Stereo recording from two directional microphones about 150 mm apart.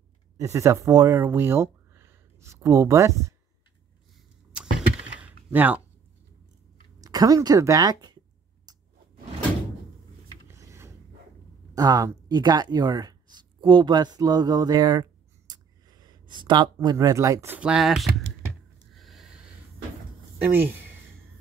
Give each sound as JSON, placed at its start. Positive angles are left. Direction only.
{"t": 0.4, "sound": "speech", "side_deg": -20}
{"t": 4.5, "sound": "door", "side_deg": -5}
{"t": 7.0, "sound": "a woman's voice", "side_deg": -25}
{"t": 8.7, "sound": "a sound", "side_deg": -25}
{"t": 10.5, "sound": "mechanisms", "side_deg": -20}
{"t": 11.7, "sound": "speech", "side_deg": -25}
{"t": 17.6, "sound": "speech", "side_deg": -5}
{"t": 18.9, "sound": "a sound", "side_deg": 0}